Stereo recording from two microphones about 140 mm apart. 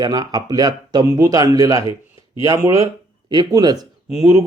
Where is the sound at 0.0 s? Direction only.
25° right (ahead or behind).